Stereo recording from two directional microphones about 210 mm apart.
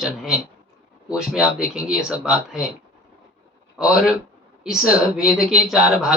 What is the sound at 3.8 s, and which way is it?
Speech, 5° right (ahead or behind).